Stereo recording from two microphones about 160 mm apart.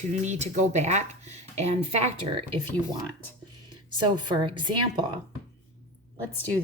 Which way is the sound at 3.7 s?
30° right (ahead or behind).